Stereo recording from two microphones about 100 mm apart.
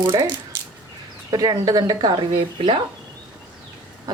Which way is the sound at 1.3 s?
40° right (ahead or behind).